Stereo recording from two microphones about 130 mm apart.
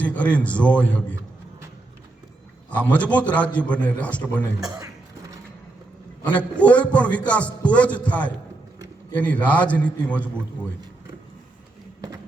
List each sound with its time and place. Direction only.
0.0 s a man's voice: 10° left (ahead or behind)
2.9 s a man's voice: 10° left (ahead or behind)
4.6 s a man's voice: 30° right (ahead or behind)
6.2 s a man's voice: 10° left (ahead or behind)